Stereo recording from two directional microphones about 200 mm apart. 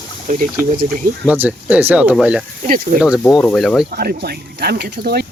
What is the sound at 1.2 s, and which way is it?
Speech, 5° right (ahead or behind).